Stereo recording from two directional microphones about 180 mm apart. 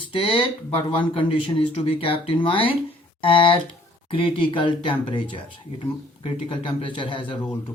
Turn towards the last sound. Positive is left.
turn(degrees=30)  # may be behind; listen again after turning